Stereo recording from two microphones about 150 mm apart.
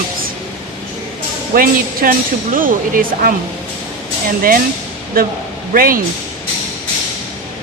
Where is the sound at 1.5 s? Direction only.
70° right (ahead or behind).